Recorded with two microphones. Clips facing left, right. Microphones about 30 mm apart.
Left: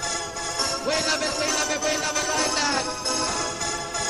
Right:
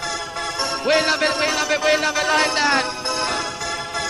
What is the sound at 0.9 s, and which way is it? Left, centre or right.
Music, right.